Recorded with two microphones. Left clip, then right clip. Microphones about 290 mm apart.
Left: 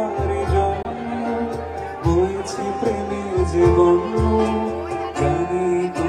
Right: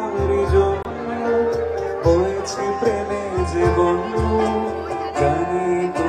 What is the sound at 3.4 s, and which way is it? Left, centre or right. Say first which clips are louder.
Music: left 3 dB; right.